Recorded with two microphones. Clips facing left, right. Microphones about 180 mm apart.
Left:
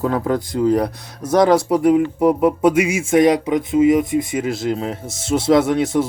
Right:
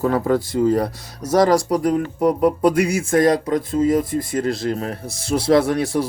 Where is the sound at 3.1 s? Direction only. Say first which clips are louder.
Left 3 dB; 20° left (ahead or behind); by 4.9 s centre (ahead or behind).